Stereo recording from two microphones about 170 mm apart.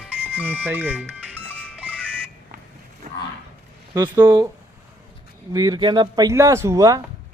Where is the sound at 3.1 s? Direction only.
45° right (ahead or behind).